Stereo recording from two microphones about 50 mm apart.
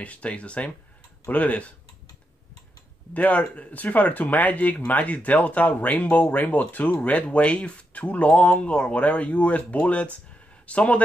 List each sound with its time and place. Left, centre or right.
0.0 s speech: left
3.1 s speech: left